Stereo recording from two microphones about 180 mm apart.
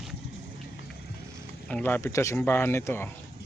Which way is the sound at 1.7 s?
10° left (ahead or behind).